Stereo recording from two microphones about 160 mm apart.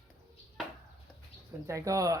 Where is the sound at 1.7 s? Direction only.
20° right (ahead or behind).